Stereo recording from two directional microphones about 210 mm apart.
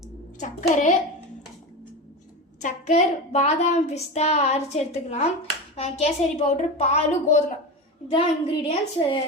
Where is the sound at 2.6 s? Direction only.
35° left (ahead or behind).